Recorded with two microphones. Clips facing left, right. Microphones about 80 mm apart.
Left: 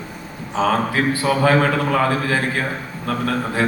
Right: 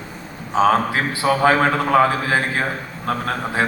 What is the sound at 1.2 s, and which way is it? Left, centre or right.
A man's voice, right.